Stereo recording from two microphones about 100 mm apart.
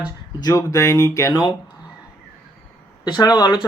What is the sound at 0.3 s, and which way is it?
Speech, 40° left (ahead or behind).